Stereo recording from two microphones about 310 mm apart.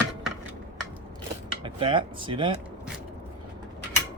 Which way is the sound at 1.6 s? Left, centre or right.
Centre.